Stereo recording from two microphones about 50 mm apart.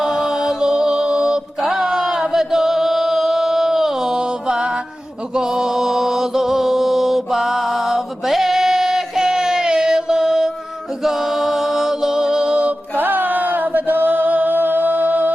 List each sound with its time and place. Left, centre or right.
0.0 s music: centre
2.2 s chant: centre
5.3 s mantra: centre
11.0 s music: centre
13.0 s chant: right